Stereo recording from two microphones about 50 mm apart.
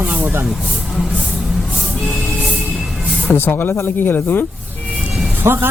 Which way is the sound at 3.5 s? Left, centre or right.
Left.